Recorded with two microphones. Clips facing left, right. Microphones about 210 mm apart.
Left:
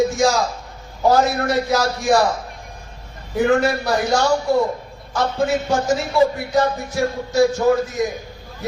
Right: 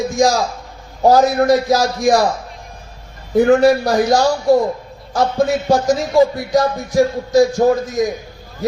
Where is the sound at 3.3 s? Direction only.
35° right (ahead or behind).